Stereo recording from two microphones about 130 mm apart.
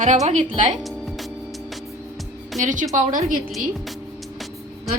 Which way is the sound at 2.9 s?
65° right (ahead or behind).